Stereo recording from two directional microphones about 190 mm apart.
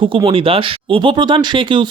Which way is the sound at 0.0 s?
25° right (ahead or behind).